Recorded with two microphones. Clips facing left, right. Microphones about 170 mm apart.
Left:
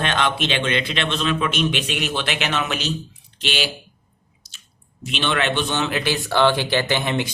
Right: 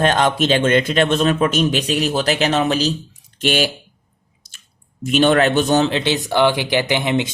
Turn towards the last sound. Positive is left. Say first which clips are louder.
# right 3 dB
turn(degrees=-20)  # may be behind; listen again after turning